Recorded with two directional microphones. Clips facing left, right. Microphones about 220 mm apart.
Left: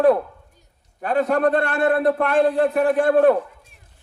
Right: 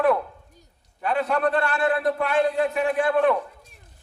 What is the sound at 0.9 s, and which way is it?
Speech, 45° left (ahead or behind).